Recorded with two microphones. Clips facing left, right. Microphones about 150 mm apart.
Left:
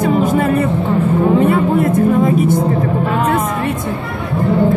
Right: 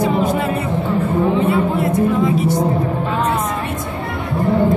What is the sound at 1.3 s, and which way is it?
Speech, 50° left (ahead or behind).